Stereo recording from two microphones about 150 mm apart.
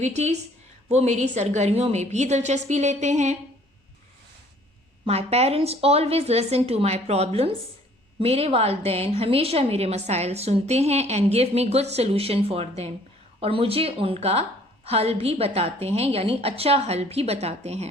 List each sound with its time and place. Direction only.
0.0 s a woman's voice: 50° right (ahead or behind)
5.0 s a woman's voice: 45° right (ahead or behind)